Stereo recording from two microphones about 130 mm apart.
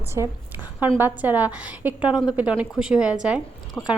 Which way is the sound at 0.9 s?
15° right (ahead or behind).